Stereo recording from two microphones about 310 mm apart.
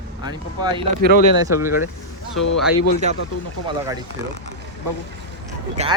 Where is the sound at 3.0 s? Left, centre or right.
Right.